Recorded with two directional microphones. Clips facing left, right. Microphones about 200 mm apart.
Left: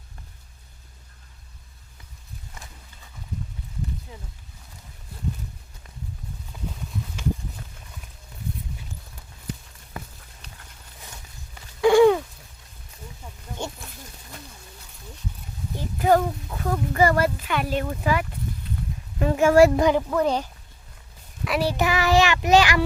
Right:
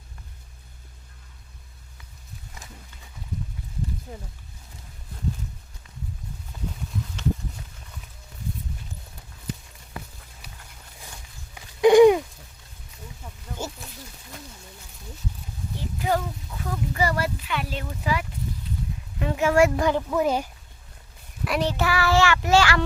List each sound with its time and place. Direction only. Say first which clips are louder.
4.1 s a sound: right 4 dB; 50° right (ahead or behind)
10.4 s horse: even; 10° right (ahead or behind)
11.5 s babbling: right 2 dB; 15° right (ahead or behind)
13.6 s a sound: left 1 dB; 5° right (ahead or behind)
15.7 s a sound: left 6 dB; 50° left (ahead or behind)
19.2 s speech: left 4 dB; 45° left (ahead or behind)
19.7 s speech: left 3 dB; 20° left (ahead or behind)
20.1 s speech: even; 5° right (ahead or behind)
21.4 s child singing: left 1 dB; centre (ahead or behind)
21.7 s child singing: left 3 dB; 20° left (ahead or behind)